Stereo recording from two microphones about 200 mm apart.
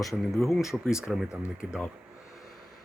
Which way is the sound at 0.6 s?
15° left (ahead or behind).